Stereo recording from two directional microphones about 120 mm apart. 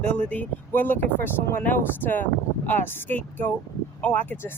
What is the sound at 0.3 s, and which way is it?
Speech, 15° left (ahead or behind).